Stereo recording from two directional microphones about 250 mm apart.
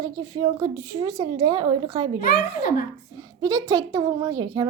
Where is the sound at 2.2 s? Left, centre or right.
Left.